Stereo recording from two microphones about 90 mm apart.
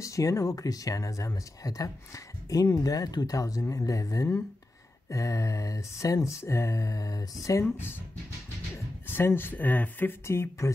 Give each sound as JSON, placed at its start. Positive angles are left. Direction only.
{"t": 0.0, "sound": "speech", "side_deg": 40}
{"t": 7.6, "sound": "speech", "side_deg": 25}
{"t": 9.0, "sound": "speech", "side_deg": 25}